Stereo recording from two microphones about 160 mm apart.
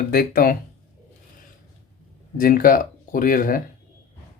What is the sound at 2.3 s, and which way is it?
Speech, 60° left (ahead or behind).